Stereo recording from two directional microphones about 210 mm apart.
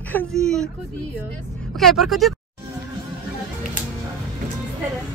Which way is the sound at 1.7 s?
Centre (ahead or behind).